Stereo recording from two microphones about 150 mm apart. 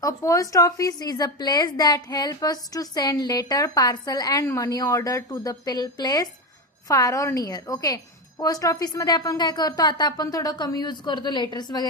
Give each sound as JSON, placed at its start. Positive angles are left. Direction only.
{"t": 0.0, "sound": "a woman's voice", "side_deg": 20}